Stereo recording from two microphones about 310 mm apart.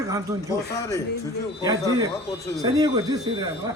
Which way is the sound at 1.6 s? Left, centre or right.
Centre.